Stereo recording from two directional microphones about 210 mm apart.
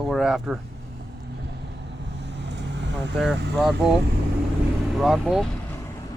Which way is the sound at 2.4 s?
55° right (ahead or behind).